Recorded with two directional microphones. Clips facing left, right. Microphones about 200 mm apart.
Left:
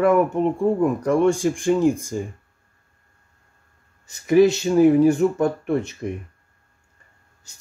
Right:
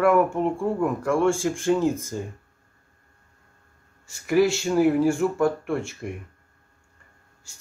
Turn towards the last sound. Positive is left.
turn(degrees=20)  # may be behind; listen again after turning